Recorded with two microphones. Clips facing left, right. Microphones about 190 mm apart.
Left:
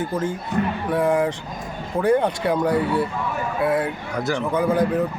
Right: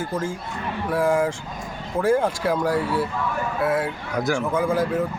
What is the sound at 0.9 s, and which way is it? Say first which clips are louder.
Speech: right 1 dB; 5° right (ahead or behind).